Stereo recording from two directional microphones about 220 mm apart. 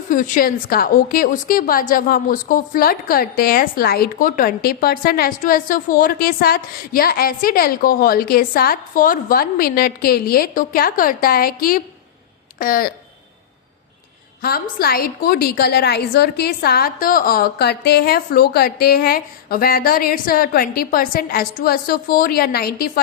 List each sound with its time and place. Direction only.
0.1 s a woman's voice: 40° left (ahead or behind)
14.4 s a woman's voice: 45° left (ahead or behind)